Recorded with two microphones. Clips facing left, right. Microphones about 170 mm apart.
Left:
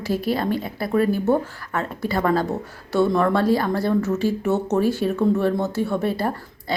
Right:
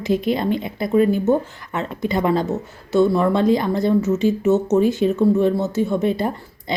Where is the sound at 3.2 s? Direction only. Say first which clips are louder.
Right 2 dB; 20° right (ahead or behind).